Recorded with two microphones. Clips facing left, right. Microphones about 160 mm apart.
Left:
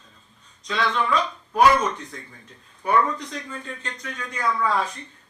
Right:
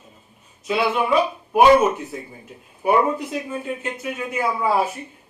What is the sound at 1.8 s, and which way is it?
Speech, 10° right (ahead or behind).